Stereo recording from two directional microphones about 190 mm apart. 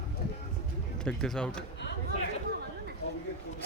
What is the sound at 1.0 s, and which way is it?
Speech, 5° left (ahead or behind).